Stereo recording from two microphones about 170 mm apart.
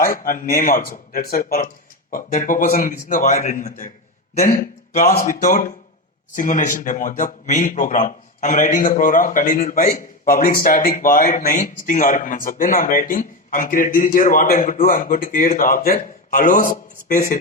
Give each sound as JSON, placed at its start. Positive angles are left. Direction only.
{"t": 0.0, "sound": "a man's voice", "side_deg": 55}
{"t": 4.9, "sound": "a man's voice", "side_deg": 55}